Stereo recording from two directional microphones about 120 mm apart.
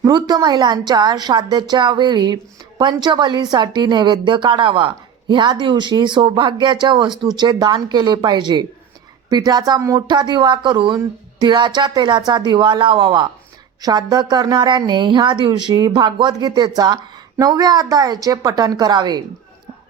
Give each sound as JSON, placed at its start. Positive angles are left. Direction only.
{"t": 0.0, "sound": "a woman's voice", "side_deg": -30}